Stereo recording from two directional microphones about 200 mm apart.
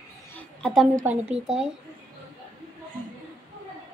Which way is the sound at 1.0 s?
5° right (ahead or behind).